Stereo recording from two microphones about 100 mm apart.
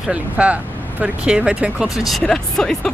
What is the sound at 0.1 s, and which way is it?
Speech, 15° right (ahead or behind).